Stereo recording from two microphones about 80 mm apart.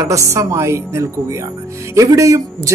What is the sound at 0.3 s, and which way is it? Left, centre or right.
Speech, right.